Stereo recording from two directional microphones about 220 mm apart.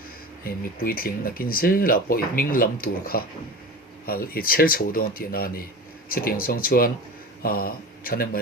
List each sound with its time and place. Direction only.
0.4 s speech: 40° left (ahead or behind)